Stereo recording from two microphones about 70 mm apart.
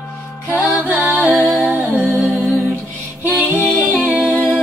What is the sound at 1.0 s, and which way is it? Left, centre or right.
Music, right.